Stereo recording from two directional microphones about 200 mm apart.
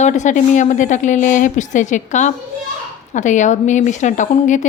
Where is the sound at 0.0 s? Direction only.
35° left (ahead or behind).